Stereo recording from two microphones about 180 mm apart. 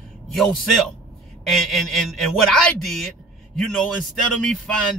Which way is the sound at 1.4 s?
Centre (ahead or behind).